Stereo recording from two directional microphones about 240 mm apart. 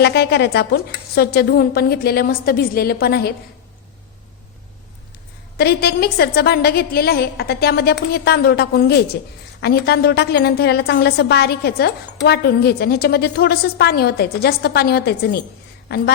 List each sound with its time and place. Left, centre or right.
0.0 s a woman's voice: left
5.5 s a woman's voice: left